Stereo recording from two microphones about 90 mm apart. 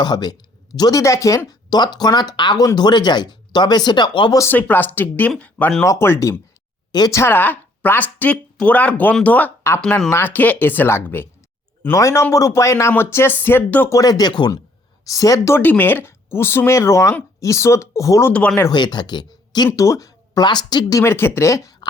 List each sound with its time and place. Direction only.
0.0 s speech: 50° left (ahead or behind)
0.8 s a man's voice: 40° left (ahead or behind)
1.5 s speech: 50° left (ahead or behind)
4.5 s speech: 20° left (ahead or behind)
5.8 s a man's voice: 35° left (ahead or behind)
11.9 s a man's voice: 35° left (ahead or behind)
13.9 s speech: 45° left (ahead or behind)
15.0 s a man's voice: 40° left (ahead or behind)
15.5 s a man's voice: 20° left (ahead or behind); by 18.3 s 35° left (ahead or behind)
18.3 s speech: 10° left (ahead or behind)
18.7 s speech: 55° left (ahead or behind)
19.7 s speech: 35° left (ahead or behind); by 20.8 s 55° left (ahead or behind)
20.9 s a man's voice: 30° left (ahead or behind)